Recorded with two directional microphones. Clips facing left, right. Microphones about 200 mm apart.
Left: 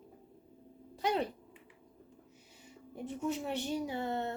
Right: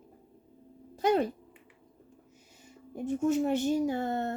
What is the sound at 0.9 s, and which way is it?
Speech, 45° right (ahead or behind).